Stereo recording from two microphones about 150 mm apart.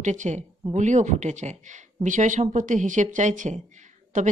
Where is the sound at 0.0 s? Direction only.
55° right (ahead or behind).